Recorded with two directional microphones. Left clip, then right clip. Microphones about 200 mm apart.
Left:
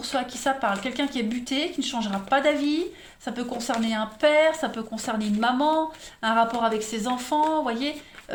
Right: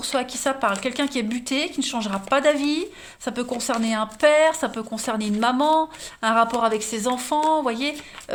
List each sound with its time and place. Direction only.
0.0 s speech: 45° right (ahead or behind)